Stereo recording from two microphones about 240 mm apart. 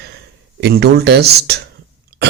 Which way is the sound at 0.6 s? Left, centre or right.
Right.